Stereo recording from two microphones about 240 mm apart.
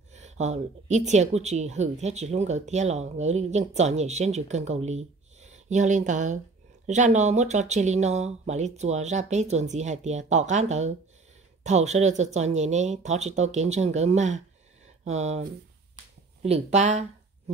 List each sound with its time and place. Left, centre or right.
0.1 s speech: right